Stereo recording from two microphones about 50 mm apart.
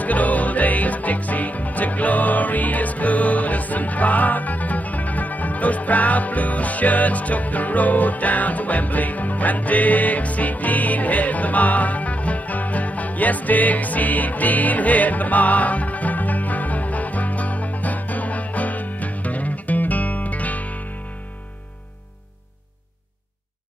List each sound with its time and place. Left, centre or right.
0.0 s music: left